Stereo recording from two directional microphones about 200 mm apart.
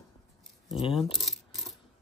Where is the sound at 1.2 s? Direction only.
Centre (ahead or behind).